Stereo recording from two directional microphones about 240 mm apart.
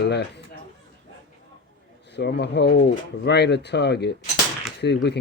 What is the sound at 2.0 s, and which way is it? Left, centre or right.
A man's voice, left.